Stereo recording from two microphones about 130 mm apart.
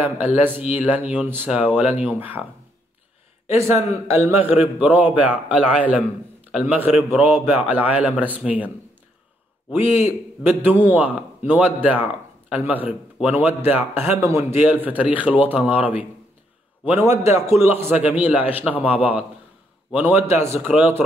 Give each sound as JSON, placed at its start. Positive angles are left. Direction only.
{"t": 0.0, "sound": "a man's voice", "side_deg": -15}
{"t": 3.4, "sound": "a man's voice", "side_deg": -20}
{"t": 9.8, "sound": "a man's voice", "side_deg": -15}